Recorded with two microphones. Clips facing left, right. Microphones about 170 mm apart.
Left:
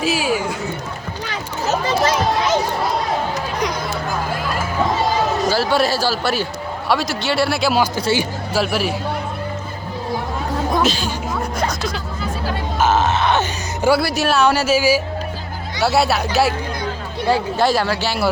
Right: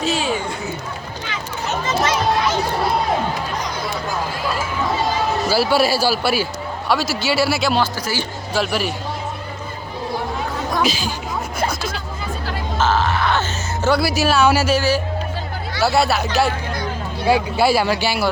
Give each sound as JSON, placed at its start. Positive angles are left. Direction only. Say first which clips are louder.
{"t": 0.0, "sound": "a sound", "louder": "left 2 dB", "side_deg": 5}
{"t": 1.3, "sound": "children playing", "louder": "left 4 dB", "side_deg": 35}
{"t": 5.5, "sound": "a man's voice", "louder": "right 3 dB", "side_deg": -10}
{"t": 7.9, "sound": "speech", "louder": "left 6 dB", "side_deg": 20}
{"t": 8.2, "sound": "a man's voice", "louder": "left 2 dB", "side_deg": 0}
{"t": 10.8, "sound": "a man's voice", "louder": "left 2 dB", "side_deg": -5}
{"t": 12.8, "sound": "music", "louder": "left 2 dB", "side_deg": 20}
{"t": 14.0, "sound": "a man's voice", "louder": "even", "side_deg": 0}
{"t": 17.2, "sound": "speech", "louder": "right 1 dB", "side_deg": -10}